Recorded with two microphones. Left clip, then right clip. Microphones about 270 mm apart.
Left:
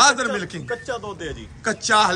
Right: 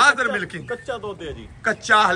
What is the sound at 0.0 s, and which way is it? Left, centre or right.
Speech, centre.